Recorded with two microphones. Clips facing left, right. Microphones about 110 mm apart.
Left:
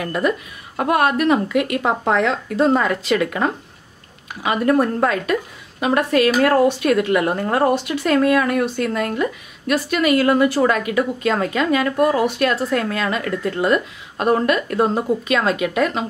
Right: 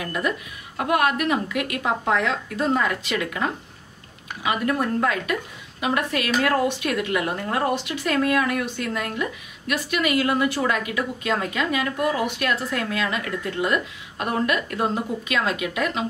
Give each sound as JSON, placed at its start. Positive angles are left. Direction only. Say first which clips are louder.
{"t": 0.0, "sound": "a woman's voice", "louder": "left 5 dB", "side_deg": 45}
{"t": 0.7, "sound": "a woman's voice", "louder": "left 4 dB", "side_deg": 35}